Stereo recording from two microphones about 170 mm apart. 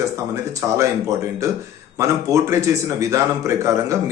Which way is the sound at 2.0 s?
15° right (ahead or behind).